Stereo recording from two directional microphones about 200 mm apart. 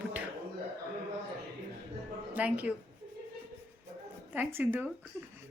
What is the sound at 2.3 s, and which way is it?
Speech, 5° right (ahead or behind).